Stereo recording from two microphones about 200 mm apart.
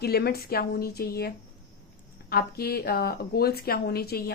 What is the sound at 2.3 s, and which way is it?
A woman's voice, 50° left (ahead or behind).